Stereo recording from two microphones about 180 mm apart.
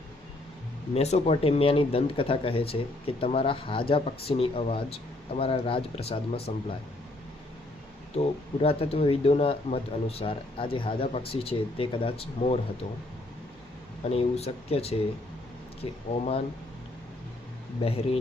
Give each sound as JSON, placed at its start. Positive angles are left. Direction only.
{"t": 0.9, "sound": "speech", "side_deg": 35}
{"t": 8.2, "sound": "speech", "side_deg": 30}
{"t": 14.1, "sound": "speech", "side_deg": 35}
{"t": 17.8, "sound": "speech", "side_deg": 35}